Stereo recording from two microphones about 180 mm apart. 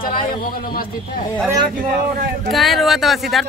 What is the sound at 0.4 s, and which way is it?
Speech, 55° left (ahead or behind).